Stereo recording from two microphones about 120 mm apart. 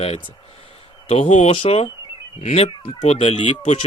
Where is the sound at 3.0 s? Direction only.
60° left (ahead or behind).